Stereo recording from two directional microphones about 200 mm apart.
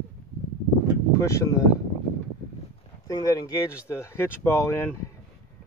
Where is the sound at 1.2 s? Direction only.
15° left (ahead or behind).